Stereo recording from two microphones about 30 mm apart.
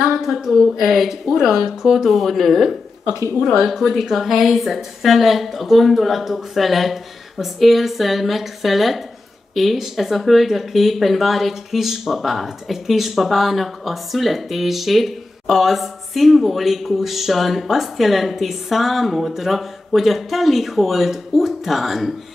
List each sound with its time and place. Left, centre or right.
0.0 s a woman's voice: centre
2.0 s speech: centre